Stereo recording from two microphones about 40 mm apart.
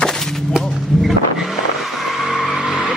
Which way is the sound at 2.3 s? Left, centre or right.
Centre.